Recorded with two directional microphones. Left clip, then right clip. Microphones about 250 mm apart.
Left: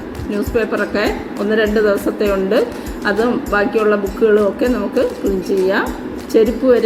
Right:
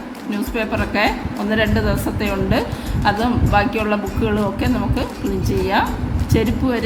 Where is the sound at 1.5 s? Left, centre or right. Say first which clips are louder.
Left 6 dB; centre.